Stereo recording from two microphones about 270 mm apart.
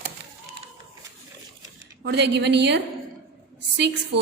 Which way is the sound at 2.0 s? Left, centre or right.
Right.